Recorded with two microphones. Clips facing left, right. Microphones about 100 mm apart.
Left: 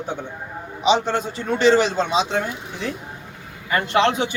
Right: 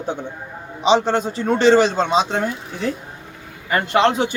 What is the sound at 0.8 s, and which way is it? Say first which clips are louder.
A man's voice: right 3 dB; 35° right (ahead or behind).